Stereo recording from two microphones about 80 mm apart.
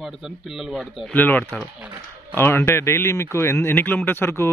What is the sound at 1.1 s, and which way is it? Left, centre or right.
A man's voice, left.